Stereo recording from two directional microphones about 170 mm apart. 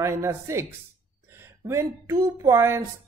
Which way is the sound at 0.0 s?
15° right (ahead or behind).